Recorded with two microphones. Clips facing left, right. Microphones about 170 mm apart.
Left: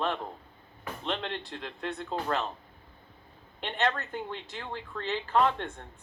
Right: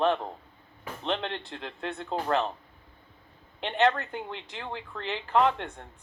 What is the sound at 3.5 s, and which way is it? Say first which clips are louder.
Speech: right 5 dB; 20° right (ahead or behind).